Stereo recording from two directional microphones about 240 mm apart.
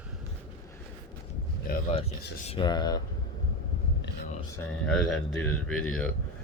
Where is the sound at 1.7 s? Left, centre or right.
Left.